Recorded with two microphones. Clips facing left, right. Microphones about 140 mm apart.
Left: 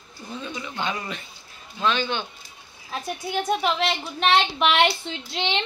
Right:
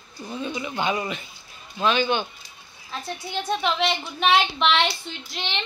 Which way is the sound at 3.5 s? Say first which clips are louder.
Right 1 dB; 5° left (ahead or behind).